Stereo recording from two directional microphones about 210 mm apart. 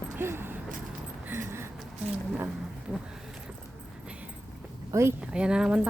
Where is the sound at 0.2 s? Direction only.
10° right (ahead or behind).